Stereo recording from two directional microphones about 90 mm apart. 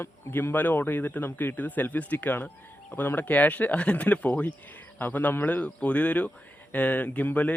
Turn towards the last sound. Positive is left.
turn(degrees=15)  # may be behind; listen again after turning